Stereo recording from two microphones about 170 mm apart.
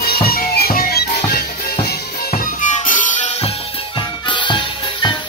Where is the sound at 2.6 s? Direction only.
50° left (ahead or behind).